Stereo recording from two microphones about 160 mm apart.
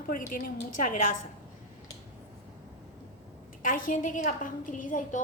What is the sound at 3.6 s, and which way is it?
A woman's voice, 55° left (ahead or behind).